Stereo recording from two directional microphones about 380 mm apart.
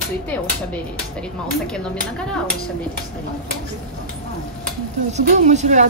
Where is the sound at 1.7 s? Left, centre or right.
Centre.